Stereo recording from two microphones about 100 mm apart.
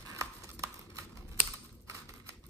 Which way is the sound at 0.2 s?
30° right (ahead or behind).